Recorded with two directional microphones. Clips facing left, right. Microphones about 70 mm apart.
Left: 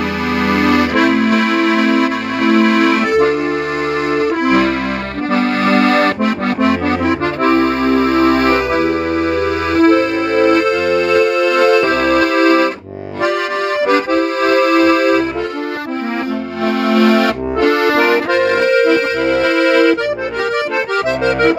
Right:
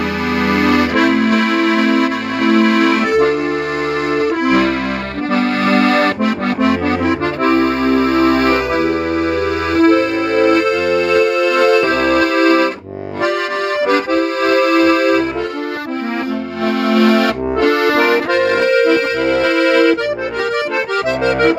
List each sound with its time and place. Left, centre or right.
0.5 s music: left
5.3 s accordion: left
9.8 s music: left
13.2 s music: centre
16.8 s accordion: left